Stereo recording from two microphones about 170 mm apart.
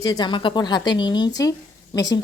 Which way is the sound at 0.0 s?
25° left (ahead or behind).